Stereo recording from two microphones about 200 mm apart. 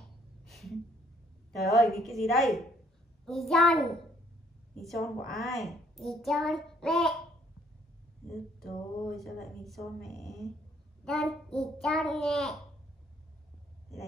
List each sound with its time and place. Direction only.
0.5 s a sound: centre (ahead or behind)
1.5 s a child's voice: centre (ahead or behind)
5.3 s a child's voice: centre (ahead or behind)
8.3 s a child's voice: centre (ahead or behind)